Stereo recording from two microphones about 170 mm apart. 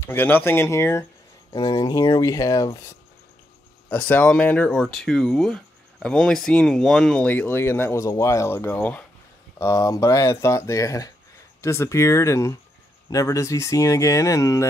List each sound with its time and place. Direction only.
0.0 s speech: 10° left (ahead or behind)